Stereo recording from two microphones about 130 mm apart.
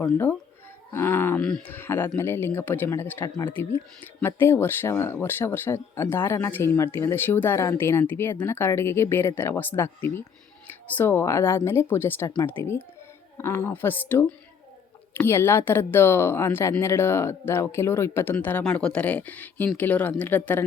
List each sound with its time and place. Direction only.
0.9 s speech: 15° left (ahead or behind)
1.4 s speech: 5° left (ahead or behind)
3.2 s speech: 30° left (ahead or behind)
3.5 s speech: 15° left (ahead or behind)